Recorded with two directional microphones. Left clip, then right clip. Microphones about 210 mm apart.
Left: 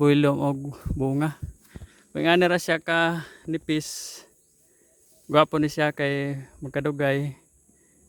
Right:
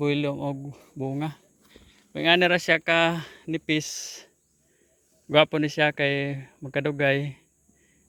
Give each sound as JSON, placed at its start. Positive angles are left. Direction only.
{"t": 0.0, "sound": "speech", "side_deg": 40}
{"t": 5.3, "sound": "speech", "side_deg": 15}